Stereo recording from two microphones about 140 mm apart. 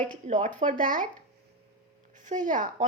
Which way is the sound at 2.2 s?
65° right (ahead or behind).